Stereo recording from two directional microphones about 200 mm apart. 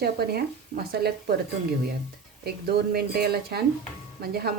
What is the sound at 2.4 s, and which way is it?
Speech, 50° right (ahead or behind).